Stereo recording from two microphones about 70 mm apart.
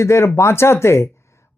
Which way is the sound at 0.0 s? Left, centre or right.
Left.